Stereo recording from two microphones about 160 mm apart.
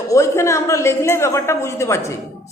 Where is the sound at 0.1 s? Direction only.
20° left (ahead or behind).